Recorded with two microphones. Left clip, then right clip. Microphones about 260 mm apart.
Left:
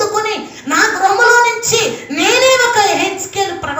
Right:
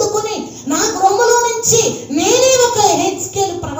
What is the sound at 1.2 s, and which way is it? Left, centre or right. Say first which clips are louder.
Child singing: left 3 dB; left.